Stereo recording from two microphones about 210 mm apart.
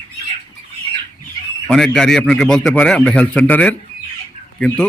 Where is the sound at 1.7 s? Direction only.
Centre (ahead or behind).